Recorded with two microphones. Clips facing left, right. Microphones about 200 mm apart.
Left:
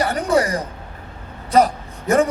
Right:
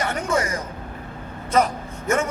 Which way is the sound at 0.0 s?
35° left (ahead or behind).